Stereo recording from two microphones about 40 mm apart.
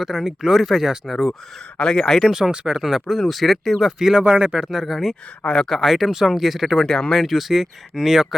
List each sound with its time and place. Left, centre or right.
0.0 s speech: centre
1.8 s speech: centre
2.5 s speech: centre
2.8 s speech: centre
4.2 s speech: right
4.5 s speech: centre
6.8 s speech: centre
7.1 s speech: centre